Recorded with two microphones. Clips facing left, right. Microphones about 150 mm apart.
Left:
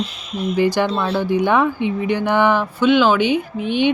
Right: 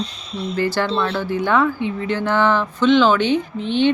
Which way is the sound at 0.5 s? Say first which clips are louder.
Left 2 dB; 15° left (ahead or behind).